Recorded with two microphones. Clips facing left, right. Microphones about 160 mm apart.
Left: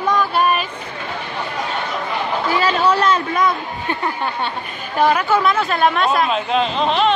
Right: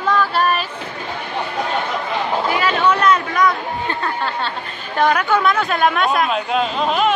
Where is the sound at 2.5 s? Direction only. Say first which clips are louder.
Left 3 dB; 35° left (ahead or behind); by 4.5 s 15° left (ahead or behind).